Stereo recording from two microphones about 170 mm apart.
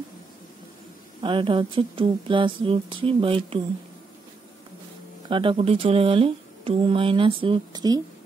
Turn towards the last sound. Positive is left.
turn(degrees=-25)  # may be behind; listen again after turning